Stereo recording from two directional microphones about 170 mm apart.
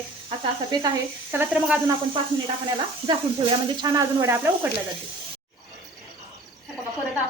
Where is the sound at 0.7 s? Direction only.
25° right (ahead or behind).